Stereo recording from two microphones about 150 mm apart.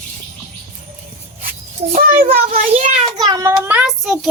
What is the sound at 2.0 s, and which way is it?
Child singing, 65° right (ahead or behind).